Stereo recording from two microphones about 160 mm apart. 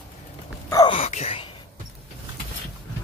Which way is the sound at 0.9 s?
40° left (ahead or behind).